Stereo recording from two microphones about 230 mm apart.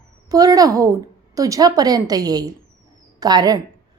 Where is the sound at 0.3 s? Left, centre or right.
Centre.